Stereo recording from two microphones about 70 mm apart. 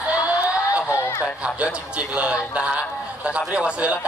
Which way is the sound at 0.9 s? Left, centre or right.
Left.